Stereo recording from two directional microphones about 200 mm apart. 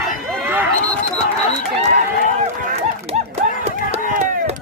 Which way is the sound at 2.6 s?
45° right (ahead or behind).